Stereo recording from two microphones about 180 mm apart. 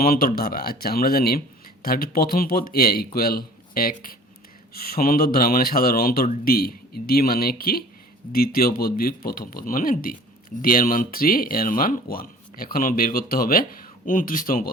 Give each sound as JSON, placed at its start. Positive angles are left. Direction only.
{"t": 0.0, "sound": "speech", "side_deg": 55}